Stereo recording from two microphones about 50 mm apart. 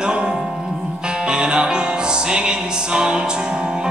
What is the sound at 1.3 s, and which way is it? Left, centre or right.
Music, centre.